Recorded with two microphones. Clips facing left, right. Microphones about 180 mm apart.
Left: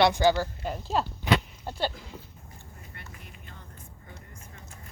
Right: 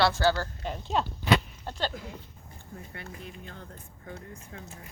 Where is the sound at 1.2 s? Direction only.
10° left (ahead or behind).